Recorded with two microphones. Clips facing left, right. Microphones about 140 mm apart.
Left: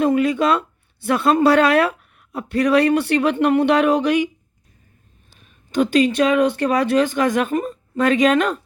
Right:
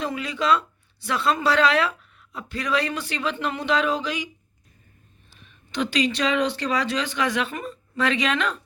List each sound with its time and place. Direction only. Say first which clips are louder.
0.0 s speech: left 10 dB; 55° left (ahead or behind)
5.7 s speech: left 8 dB; 50° left (ahead or behind)